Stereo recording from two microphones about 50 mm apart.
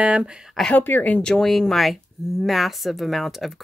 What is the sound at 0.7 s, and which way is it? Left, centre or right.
Speech, left.